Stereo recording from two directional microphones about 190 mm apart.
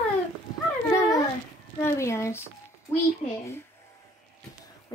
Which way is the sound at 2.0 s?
15° left (ahead or behind).